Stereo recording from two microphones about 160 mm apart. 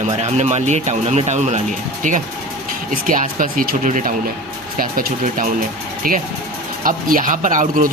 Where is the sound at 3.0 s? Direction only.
55° right (ahead or behind).